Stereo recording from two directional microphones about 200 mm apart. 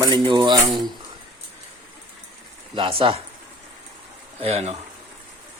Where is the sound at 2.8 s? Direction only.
25° right (ahead or behind).